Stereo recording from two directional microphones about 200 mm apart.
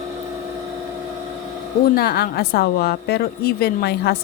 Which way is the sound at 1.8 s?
50° left (ahead or behind).